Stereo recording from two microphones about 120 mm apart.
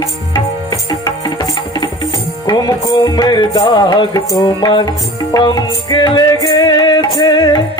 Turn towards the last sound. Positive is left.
turn(degrees=35)  # may be behind; listen again after turning